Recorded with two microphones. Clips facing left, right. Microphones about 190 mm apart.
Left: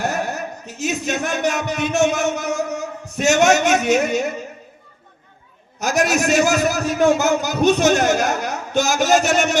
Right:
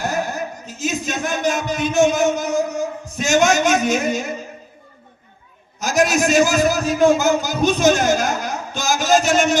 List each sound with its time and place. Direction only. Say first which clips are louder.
0.0 s speech: even; 65° left (ahead or behind)
5.8 s a man's voice: right 1 dB; 65° left (ahead or behind)